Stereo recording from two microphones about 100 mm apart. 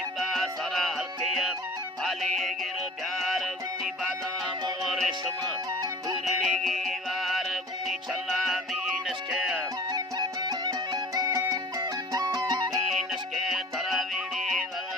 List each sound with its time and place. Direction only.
0.2 s music: centre (ahead or behind)
4.9 s music: 5° left (ahead or behind)
6.4 s music: centre (ahead or behind)
9.9 s music: 45° right (ahead or behind)
12.9 s music: centre (ahead or behind)